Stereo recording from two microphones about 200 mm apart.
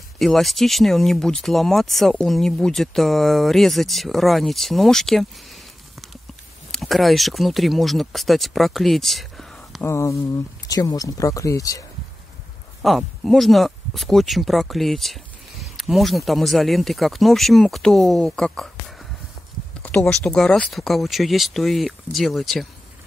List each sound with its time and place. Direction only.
0.2 s speech: centre (ahead or behind); by 11.8 s 15° left (ahead or behind)
12.8 s speech: centre (ahead or behind)
19.8 s a sound: 5° left (ahead or behind)
20.2 s speech: 5° left (ahead or behind)